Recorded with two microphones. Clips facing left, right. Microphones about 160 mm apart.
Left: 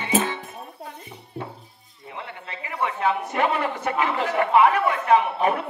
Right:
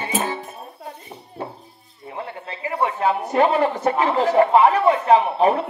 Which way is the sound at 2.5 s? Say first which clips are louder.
Right 4 dB; 35° right (ahead or behind).